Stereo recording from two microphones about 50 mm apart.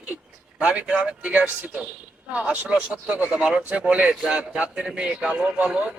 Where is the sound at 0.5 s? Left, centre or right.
Right.